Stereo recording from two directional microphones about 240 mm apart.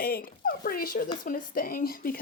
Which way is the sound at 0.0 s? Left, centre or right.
Left.